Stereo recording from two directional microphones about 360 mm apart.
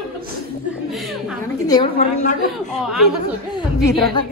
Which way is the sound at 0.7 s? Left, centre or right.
Centre.